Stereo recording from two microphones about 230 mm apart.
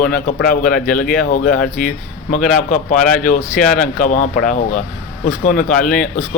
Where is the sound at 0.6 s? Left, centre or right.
Centre.